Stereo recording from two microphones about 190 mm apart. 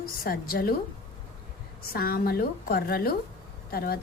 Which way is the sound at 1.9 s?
50° left (ahead or behind).